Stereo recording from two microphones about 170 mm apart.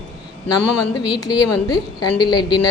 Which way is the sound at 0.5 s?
25° left (ahead or behind).